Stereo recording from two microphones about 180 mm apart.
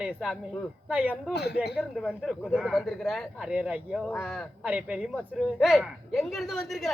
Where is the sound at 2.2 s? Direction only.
5° right (ahead or behind).